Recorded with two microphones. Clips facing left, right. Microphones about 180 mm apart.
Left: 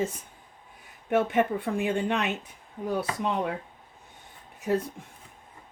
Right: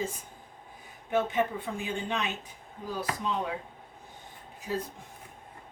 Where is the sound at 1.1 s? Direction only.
65° left (ahead or behind).